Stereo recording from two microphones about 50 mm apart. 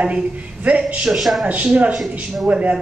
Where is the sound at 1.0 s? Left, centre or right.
Centre.